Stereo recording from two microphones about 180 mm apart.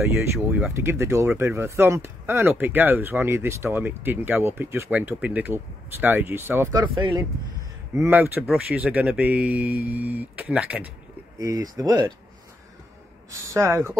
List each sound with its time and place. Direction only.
0.4 s speech: 5° right (ahead or behind)
7.0 s speech: 25° right (ahead or behind)
7.9 s speech: 15° right (ahead or behind)
11.3 s speech: 20° right (ahead or behind)
13.5 s speech: 15° right (ahead or behind)